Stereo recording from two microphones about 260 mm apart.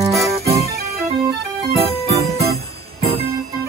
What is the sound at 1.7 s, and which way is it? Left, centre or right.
Music, right.